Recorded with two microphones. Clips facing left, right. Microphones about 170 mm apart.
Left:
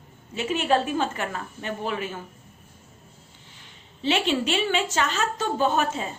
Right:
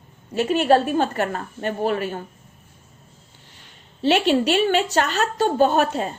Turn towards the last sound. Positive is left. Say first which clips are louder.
# right 4 dB
turn(degrees=-60)  # may be behind; listen again after turning